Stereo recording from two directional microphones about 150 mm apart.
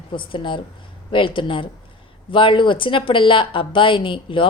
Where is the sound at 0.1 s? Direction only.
35° left (ahead or behind).